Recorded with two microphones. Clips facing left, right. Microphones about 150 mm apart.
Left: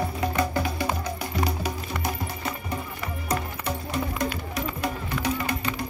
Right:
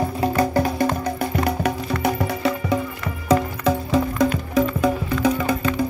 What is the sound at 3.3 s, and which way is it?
Music, 90° right.